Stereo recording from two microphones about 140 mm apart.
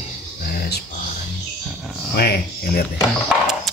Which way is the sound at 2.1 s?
90° left.